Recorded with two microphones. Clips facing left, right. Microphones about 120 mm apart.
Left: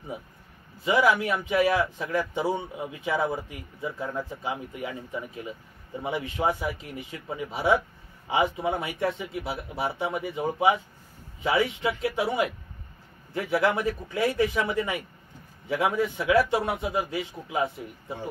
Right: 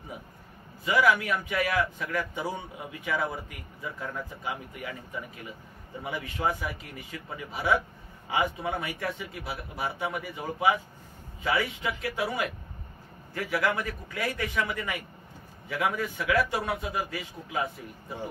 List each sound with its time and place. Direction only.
0.8 s a man's voice: 25° left (ahead or behind)